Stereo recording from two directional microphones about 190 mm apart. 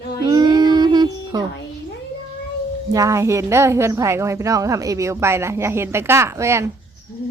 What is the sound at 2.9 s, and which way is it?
A woman's voice, 15° right (ahead or behind).